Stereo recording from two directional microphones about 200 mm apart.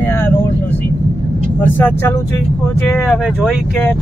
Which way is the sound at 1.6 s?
10° left (ahead or behind).